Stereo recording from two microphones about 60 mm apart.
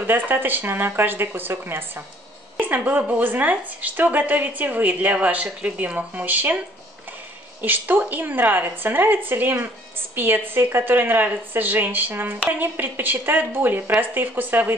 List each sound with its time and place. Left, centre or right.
0.0 s a woman's voice: right
7.6 s a woman's voice: right